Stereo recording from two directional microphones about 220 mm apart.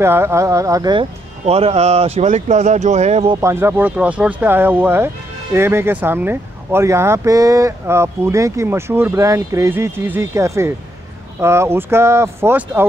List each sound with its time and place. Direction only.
0.0 s speech: 10° right (ahead or behind)
1.4 s speech: 30° right (ahead or behind)
3.3 s speech: 10° right (ahead or behind)